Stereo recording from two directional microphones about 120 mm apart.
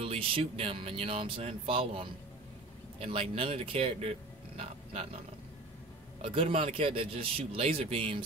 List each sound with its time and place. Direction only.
0.0 s speech: 55° right (ahead or behind)
6.2 s speech: 50° right (ahead or behind)